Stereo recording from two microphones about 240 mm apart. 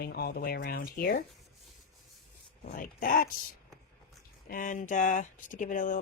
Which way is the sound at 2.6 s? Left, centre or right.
Left.